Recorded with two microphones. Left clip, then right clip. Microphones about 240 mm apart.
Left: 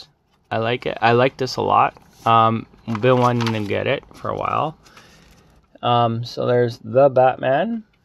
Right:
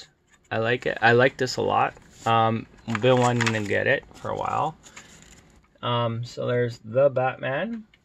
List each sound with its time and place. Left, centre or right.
0.0 s speech: centre; by 4.7 s left
5.8 s speech: left